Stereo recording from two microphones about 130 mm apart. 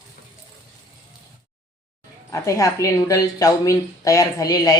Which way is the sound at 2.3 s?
25° left (ahead or behind).